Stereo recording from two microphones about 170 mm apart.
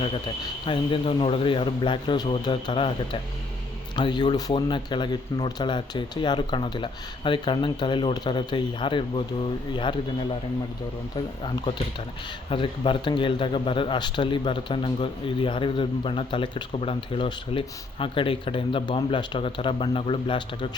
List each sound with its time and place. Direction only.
0.6 s speech: 30° left (ahead or behind)
12.5 s speech: 30° left (ahead or behind)